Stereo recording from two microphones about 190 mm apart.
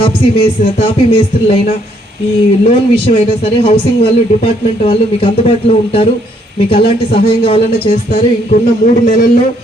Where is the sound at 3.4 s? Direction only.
30° left (ahead or behind).